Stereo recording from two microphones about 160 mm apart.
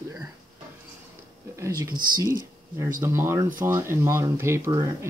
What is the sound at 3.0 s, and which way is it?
Speech, 15° right (ahead or behind).